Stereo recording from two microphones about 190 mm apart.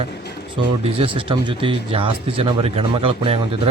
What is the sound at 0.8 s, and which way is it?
Speech, 30° right (ahead or behind).